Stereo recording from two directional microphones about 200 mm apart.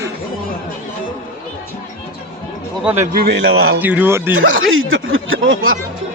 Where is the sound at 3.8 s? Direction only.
10° right (ahead or behind).